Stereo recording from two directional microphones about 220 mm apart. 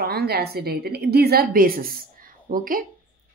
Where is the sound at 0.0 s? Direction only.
45° right (ahead or behind).